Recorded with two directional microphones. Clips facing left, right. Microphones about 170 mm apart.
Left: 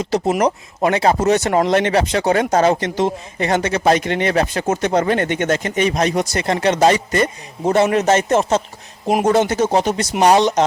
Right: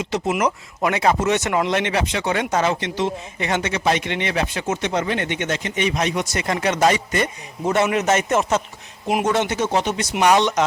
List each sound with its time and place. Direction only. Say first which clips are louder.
0.0 s speech: left 4 dB; 35° left (ahead or behind)